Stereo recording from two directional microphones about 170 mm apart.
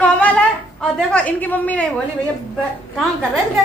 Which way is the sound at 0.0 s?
10° left (ahead or behind).